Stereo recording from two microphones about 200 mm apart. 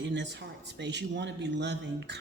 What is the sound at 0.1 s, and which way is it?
A woman's voice, 60° right (ahead or behind).